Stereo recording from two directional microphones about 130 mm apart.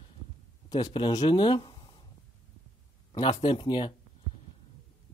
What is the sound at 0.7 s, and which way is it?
Speech, 30° left (ahead or behind).